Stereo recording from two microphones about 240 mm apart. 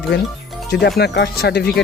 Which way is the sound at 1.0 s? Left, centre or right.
Left.